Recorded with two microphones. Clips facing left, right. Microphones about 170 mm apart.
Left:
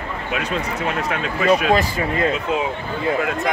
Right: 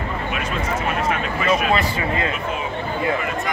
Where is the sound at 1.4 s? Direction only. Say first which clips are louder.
Left 4 dB; 40° left (ahead or behind).